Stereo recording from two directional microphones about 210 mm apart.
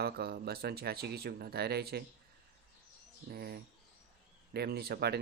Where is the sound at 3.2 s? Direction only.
50° right (ahead or behind).